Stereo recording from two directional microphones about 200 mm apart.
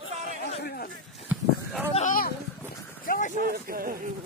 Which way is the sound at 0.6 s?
50° left (ahead or behind).